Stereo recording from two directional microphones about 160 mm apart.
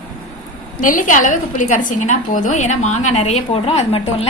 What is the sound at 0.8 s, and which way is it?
A woman's voice, 55° left (ahead or behind).